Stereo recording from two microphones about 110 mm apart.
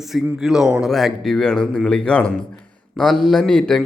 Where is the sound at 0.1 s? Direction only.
5° right (ahead or behind).